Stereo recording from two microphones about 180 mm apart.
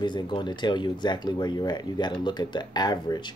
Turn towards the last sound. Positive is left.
turn(degrees=20)  # may be behind; listen again after turning